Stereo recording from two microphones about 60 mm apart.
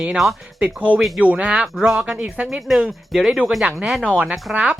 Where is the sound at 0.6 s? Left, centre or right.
Right.